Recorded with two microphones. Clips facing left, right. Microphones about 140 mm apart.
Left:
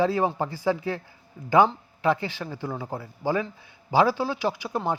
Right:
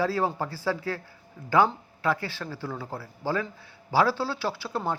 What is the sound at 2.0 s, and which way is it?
A man's voice, 20° left (ahead or behind).